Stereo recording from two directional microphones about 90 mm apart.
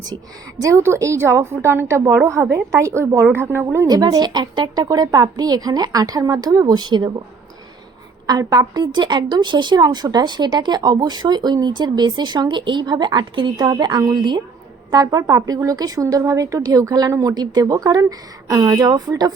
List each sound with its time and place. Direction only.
0.6 s a woman's voice: 35° right (ahead or behind)
3.8 s speech: 45° right (ahead or behind)
8.3 s speech: 50° right (ahead or behind)